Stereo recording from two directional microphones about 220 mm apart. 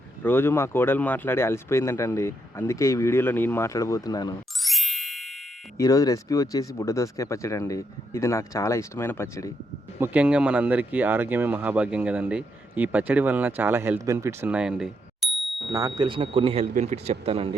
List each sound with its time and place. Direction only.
0.2 s speech: 10° left (ahead or behind)
4.6 s music: centre (ahead or behind)
5.7 s speech: 15° left (ahead or behind)
10.0 s speech: 5° right (ahead or behind)
15.7 s speech: 15° right (ahead or behind)